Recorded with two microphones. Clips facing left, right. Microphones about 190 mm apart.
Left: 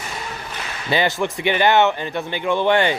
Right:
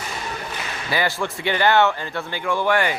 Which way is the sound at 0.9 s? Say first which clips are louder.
Left 4 dB; 20° left (ahead or behind).